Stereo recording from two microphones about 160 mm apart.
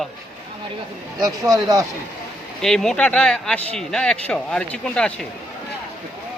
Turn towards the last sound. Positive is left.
turn(degrees=5)  # may be behind; listen again after turning